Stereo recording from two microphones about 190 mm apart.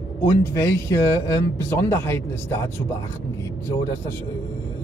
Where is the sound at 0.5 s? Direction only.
15° left (ahead or behind).